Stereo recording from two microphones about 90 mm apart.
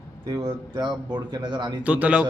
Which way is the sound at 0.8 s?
55° right (ahead or behind).